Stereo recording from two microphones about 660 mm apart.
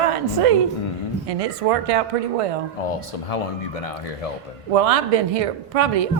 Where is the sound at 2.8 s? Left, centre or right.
Left.